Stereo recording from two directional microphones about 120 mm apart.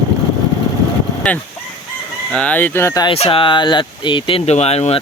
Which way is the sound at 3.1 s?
50° left (ahead or behind).